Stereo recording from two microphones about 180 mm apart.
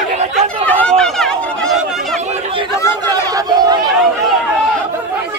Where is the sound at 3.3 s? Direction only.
20° right (ahead or behind).